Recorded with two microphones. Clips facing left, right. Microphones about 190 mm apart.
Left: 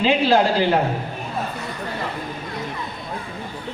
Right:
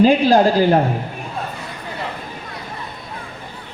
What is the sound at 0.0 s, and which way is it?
Speech, 40° right (ahead or behind).